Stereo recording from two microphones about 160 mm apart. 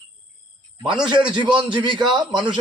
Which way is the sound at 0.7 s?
30° right (ahead or behind).